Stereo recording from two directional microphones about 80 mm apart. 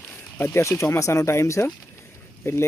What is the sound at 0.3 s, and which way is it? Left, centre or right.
Speech, left.